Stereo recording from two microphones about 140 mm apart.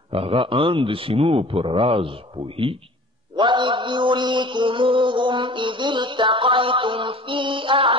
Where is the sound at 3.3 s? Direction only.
35° right (ahead or behind).